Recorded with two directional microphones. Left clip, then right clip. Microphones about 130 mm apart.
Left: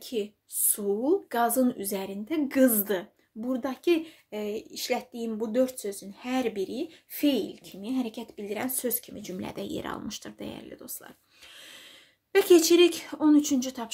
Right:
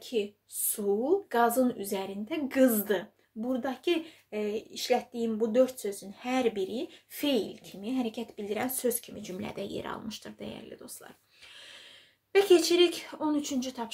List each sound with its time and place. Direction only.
0.0 s speech: 40° left (ahead or behind)
12.3 s speech: 55° left (ahead or behind)